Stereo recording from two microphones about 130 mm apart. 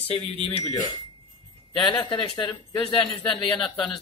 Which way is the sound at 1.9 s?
35° left (ahead or behind).